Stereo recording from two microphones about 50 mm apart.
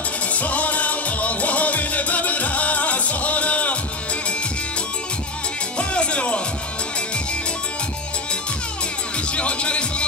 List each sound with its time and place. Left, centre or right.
0.3 s music: left
5.8 s music: left
9.3 s music: left